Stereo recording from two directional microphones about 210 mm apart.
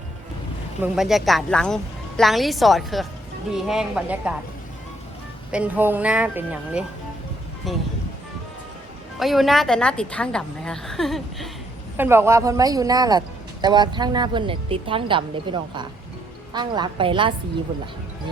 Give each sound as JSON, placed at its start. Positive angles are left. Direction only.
{"t": 0.8, "sound": "a woman's voice", "side_deg": 0}
{"t": 5.5, "sound": "a woman's voice", "side_deg": -5}
{"t": 9.1, "sound": "a woman's voice", "side_deg": 0}
{"t": 11.9, "sound": "speech", "side_deg": -10}